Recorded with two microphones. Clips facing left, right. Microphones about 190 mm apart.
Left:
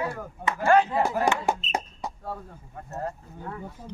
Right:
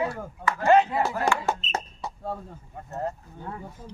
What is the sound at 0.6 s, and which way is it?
Speech, 20° right (ahead or behind).